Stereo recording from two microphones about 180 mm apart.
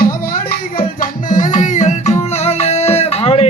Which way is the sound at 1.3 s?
45° left (ahead or behind).